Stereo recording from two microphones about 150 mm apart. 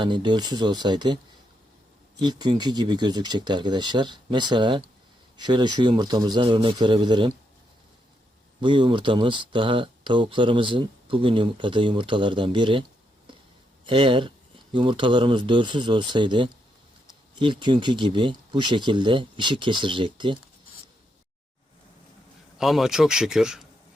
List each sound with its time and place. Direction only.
0.0 s speech: 30° right (ahead or behind)
2.2 s speech: 30° right (ahead or behind)
8.6 s speech: 35° right (ahead or behind)
13.8 s speech: 35° right (ahead or behind)
22.5 s speech: centre (ahead or behind)